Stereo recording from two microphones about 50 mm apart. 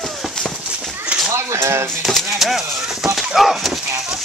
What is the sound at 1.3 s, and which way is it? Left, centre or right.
Speech, right.